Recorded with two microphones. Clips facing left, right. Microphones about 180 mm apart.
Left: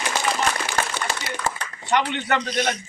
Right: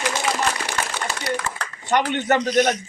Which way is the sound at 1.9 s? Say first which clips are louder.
Right 3 dB; 45° right (ahead or behind).